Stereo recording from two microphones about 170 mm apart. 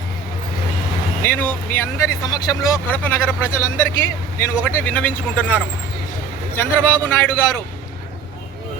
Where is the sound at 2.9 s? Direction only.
10° left (ahead or behind).